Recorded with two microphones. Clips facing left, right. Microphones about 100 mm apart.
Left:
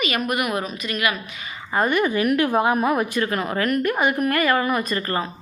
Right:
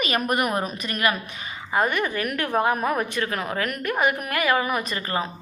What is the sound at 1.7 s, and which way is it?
A woman's voice, centre (ahead or behind).